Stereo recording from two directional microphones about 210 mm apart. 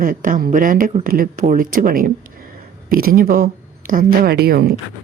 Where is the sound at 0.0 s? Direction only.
40° right (ahead or behind).